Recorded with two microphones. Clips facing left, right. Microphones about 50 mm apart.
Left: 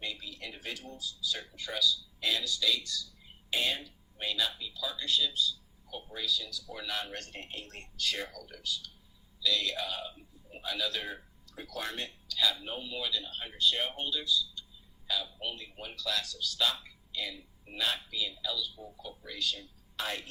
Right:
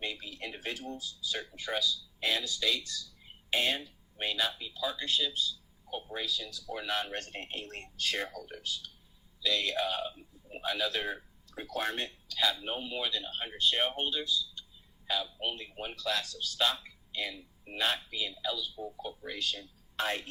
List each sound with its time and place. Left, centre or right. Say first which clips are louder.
0.0 s speech: right 2 dB; right